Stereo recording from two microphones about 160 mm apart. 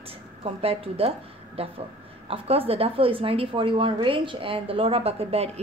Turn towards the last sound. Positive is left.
turn(degrees=-40)  # may be behind; listen again after turning